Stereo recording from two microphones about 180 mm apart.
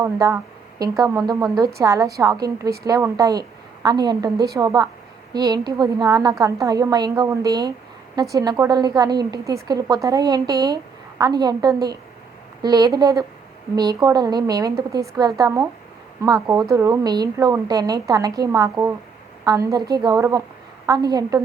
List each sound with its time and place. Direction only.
0.0 s a woman's voice: 20° right (ahead or behind)